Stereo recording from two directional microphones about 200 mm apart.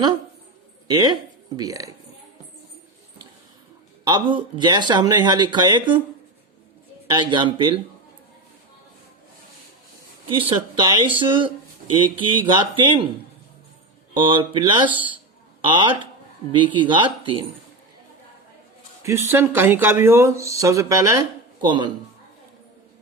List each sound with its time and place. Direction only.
0.9 s speech: 20° right (ahead or behind)
4.0 s speech: 20° right (ahead or behind)
7.1 s speech: 25° right (ahead or behind)
10.3 s speech: 25° right (ahead or behind)
14.1 s speech: 25° right (ahead or behind)
19.3 s speech: 10° right (ahead or behind)